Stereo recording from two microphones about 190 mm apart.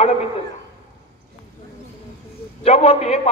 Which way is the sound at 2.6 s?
30° left (ahead or behind).